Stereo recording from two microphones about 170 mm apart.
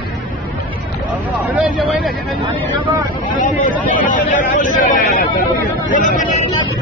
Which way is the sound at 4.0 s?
50° left (ahead or behind).